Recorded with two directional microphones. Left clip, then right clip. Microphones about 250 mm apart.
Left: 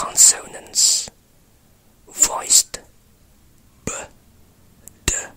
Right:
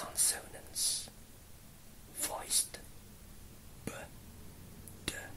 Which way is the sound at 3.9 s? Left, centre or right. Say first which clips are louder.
Left 16 dB; left.